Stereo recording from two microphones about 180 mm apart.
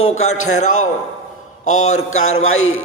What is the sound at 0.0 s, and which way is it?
Speech, 40° left (ahead or behind).